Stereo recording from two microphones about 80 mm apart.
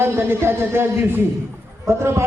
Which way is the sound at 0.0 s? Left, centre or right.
Right.